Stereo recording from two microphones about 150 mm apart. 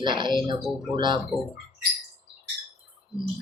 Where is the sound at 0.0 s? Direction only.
30° right (ahead or behind).